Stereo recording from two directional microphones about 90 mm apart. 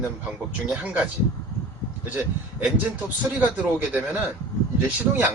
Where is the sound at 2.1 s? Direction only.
15° right (ahead or behind).